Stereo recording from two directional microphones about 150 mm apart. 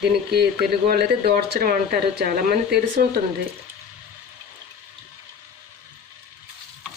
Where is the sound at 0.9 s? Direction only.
90° right.